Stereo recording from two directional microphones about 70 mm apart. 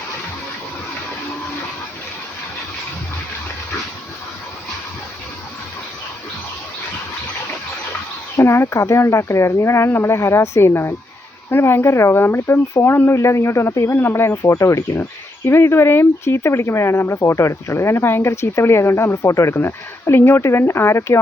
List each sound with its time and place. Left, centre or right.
8.4 s speech: left